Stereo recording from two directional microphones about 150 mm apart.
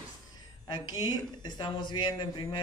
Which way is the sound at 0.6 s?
30° left (ahead or behind).